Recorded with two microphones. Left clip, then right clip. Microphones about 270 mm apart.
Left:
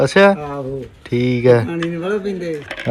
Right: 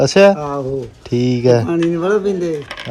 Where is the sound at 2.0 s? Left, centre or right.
Right.